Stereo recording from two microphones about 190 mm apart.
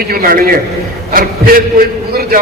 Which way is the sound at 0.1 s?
50° right (ahead or behind).